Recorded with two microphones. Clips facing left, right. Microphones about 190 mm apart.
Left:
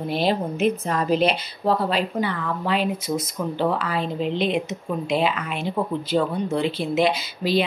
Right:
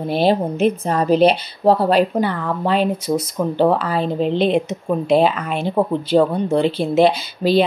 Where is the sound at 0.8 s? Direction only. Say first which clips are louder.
Right 6 dB; 35° right (ahead or behind).